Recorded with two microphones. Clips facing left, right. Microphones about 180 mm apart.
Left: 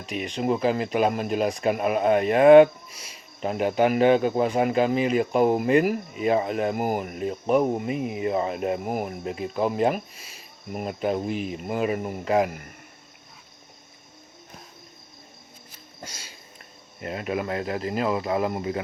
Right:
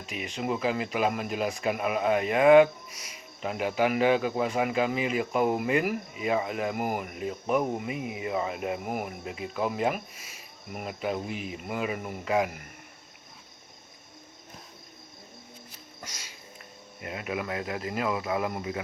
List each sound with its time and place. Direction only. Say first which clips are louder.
0.1 s speech: left 6 dB; 35° left (ahead or behind)
2.9 s speech: even; 30° left (ahead or behind)
16.0 s a sound: left 4 dB; 30° left (ahead or behind)
17.0 s speech: left 5 dB; 40° left (ahead or behind)